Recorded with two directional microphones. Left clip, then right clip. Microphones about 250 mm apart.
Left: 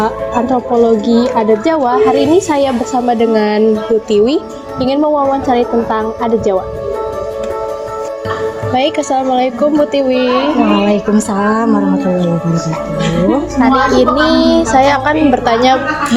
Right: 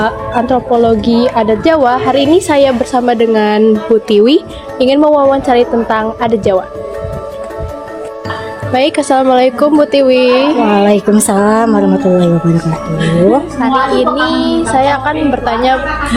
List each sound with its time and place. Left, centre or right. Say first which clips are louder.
0.0 s a woman's voice: right 1 dB; right
8.7 s a woman's voice: right 4 dB; right
10.8 s a woman's voice: right 4 dB; right
13.6 s a woman's voice: left 1 dB; centre